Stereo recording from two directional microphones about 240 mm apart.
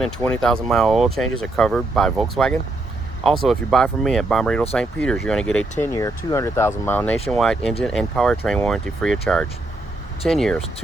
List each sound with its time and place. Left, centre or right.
0.0 s speech: centre